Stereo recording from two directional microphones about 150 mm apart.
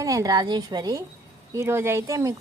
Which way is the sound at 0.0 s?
20° right (ahead or behind).